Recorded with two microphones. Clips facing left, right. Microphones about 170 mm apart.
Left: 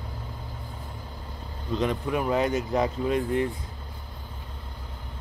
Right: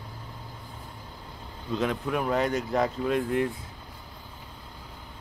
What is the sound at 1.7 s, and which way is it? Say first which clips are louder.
Speech: left 1 dB; centre (ahead or behind).